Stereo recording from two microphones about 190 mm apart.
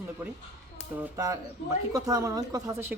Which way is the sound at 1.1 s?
15° right (ahead or behind).